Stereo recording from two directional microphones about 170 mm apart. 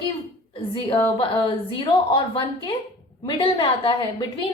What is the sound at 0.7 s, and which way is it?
A woman's voice, 25° left (ahead or behind).